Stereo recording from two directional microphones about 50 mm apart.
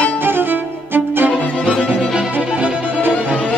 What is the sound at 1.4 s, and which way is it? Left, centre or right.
Music, left.